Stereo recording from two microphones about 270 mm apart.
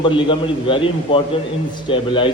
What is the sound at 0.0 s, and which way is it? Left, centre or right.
A man's voice, centre.